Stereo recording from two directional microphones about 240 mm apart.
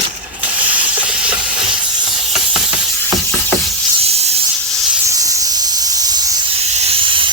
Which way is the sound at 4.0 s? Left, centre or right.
Right.